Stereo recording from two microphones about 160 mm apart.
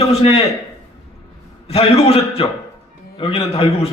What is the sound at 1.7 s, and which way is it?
A man's voice, 40° left (ahead or behind).